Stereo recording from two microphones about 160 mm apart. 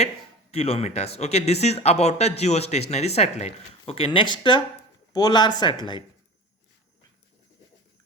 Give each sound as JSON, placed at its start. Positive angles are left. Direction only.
{"t": 0.5, "sound": "speech", "side_deg": 40}